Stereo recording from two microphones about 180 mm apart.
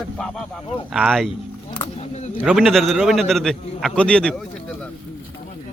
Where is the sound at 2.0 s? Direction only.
35° left (ahead or behind).